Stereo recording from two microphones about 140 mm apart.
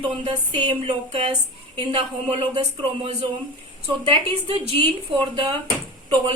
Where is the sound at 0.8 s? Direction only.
45° right (ahead or behind).